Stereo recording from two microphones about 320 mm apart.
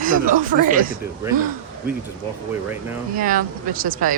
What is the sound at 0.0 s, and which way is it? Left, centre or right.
Speech, right.